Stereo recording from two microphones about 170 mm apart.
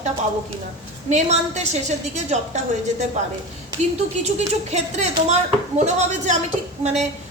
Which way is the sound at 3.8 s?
40° right (ahead or behind).